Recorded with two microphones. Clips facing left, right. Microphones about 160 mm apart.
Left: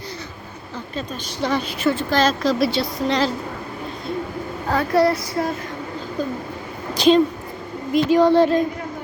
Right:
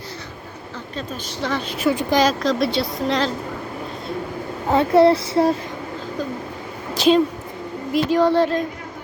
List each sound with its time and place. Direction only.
0.9 s a woman's voice: 15° left (ahead or behind)
1.8 s speech: 15° right (ahead or behind)
2.4 s speech: 5° left (ahead or behind)
4.7 s child singing: 25° right (ahead or behind)
6.9 s a sound: 5° right (ahead or behind)
7.9 s speech: centre (ahead or behind)